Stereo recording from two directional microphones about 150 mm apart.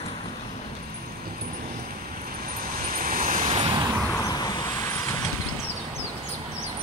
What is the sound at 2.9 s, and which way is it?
Vehicle, 70° right (ahead or behind).